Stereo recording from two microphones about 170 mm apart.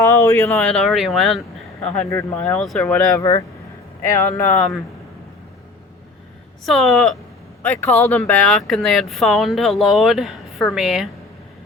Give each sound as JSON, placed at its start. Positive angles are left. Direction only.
{"t": 0.0, "sound": "speech", "side_deg": 20}
{"t": 0.5, "sound": "speech", "side_deg": 0}
{"t": 2.0, "sound": "speech", "side_deg": 15}
{"t": 3.2, "sound": "speech", "side_deg": 20}
{"t": 4.5, "sound": "speech", "side_deg": 0}
{"t": 6.7, "sound": "speech", "side_deg": 0}
{"t": 7.6, "sound": "speech", "side_deg": 15}
{"t": 8.2, "sound": "speech", "side_deg": 0}